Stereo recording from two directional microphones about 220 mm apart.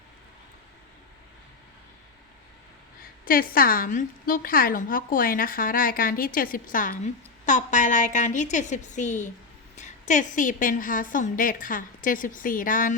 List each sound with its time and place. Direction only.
3.2 s a woman's voice: 40° left (ahead or behind)